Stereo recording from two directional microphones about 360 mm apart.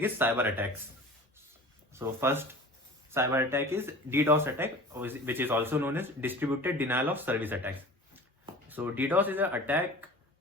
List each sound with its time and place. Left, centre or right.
0.0 s speech: centre
1.9 s speech: centre